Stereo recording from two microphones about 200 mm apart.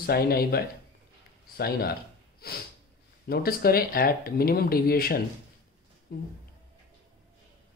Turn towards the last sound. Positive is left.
turn(degrees=50)  # may be behind; listen again after turning